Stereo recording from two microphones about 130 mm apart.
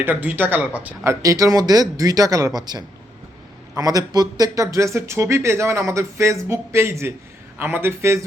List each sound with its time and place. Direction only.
0.0 s speech: 15° right (ahead or behind)
1.0 s speech: 25° right (ahead or behind)